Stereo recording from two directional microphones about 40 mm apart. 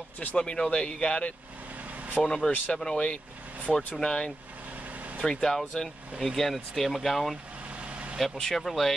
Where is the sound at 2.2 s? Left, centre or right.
Centre.